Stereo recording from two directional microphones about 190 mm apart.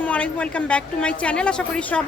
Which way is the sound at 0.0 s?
5° left (ahead or behind).